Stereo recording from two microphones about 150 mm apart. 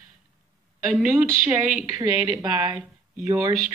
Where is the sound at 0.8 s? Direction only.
10° right (ahead or behind).